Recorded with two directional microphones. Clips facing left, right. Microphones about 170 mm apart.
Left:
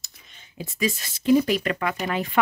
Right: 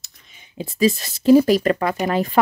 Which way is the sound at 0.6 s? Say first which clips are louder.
Right 8 dB; 35° right (ahead or behind).